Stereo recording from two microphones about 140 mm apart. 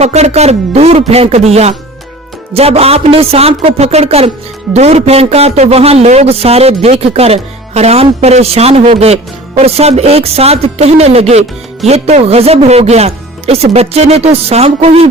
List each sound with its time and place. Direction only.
0.0 s a man's voice: 50° right (ahead or behind)